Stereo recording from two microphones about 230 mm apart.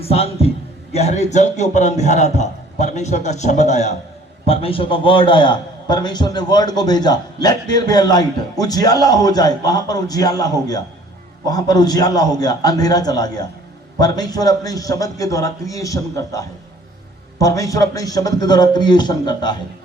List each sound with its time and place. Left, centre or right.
0.0 s a man's voice: left